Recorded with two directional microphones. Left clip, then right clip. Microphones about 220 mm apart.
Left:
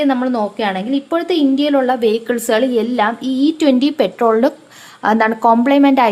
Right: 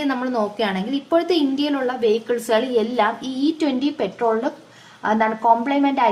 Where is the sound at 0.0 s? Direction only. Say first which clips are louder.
Left 6 dB; 30° left (ahead or behind).